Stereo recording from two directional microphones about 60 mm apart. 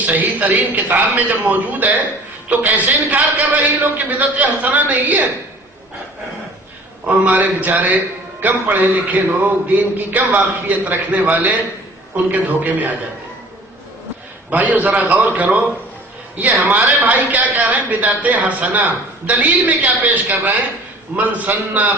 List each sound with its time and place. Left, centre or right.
0.0 s speech: right
7.3 s speech: right
14.5 s speech: right